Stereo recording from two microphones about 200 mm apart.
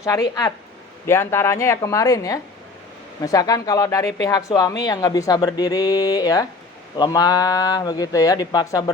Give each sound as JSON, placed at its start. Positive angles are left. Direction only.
{"t": 0.0, "sound": "speech", "side_deg": 15}